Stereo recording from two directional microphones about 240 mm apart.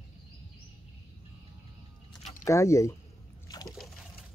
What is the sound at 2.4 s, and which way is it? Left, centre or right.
Speech, centre.